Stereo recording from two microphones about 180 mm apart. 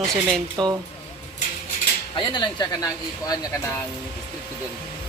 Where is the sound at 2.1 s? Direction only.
25° left (ahead or behind).